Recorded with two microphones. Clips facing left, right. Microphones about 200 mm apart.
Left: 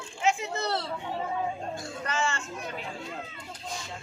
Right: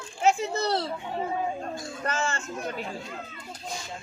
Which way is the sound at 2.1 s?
40° right (ahead or behind).